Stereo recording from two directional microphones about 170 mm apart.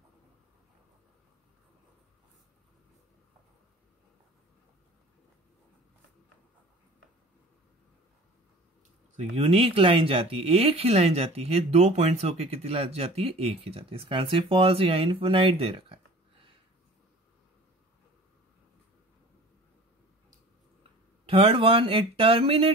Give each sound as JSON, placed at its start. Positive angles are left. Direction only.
{"t": 9.1, "sound": "speech", "side_deg": -35}
{"t": 21.3, "sound": "speech", "side_deg": -35}